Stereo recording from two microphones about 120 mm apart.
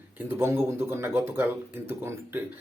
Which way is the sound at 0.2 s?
20° right (ahead or behind).